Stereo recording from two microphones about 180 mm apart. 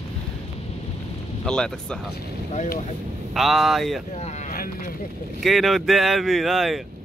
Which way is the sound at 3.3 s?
Centre (ahead or behind).